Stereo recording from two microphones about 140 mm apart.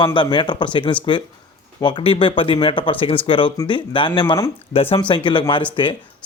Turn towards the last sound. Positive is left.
turn(degrees=35)  # may be behind; listen again after turning